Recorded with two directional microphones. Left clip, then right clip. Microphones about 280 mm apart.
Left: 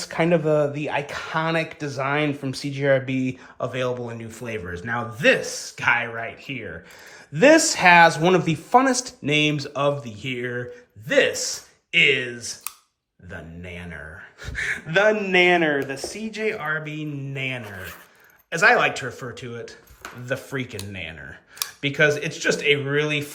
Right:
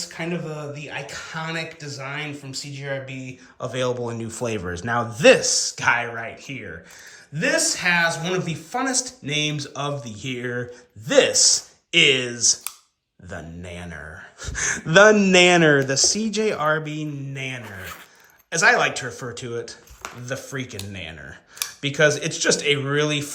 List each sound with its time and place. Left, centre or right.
0.0 s speech: centre
3.6 s speech: centre